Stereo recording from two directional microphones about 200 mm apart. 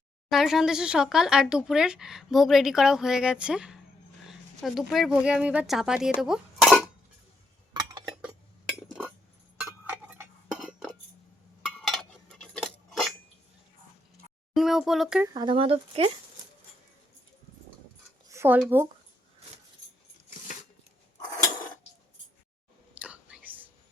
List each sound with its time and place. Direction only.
0.3 s speech: centre (ahead or behind)
9.9 s chink: 10° right (ahead or behind)
11.6 s cutlery: centre (ahead or behind)
14.5 s speech: centre (ahead or behind)
15.3 s speech: 20° right (ahead or behind)
18.3 s a sound: 10° right (ahead or behind)
23.0 s whispering: 5° right (ahead or behind)